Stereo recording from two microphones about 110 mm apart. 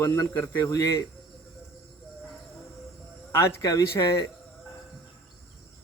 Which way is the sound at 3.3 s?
30° left (ahead or behind).